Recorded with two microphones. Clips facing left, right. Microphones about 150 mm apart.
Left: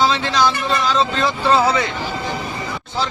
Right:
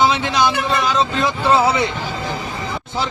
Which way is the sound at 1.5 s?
20° right (ahead or behind).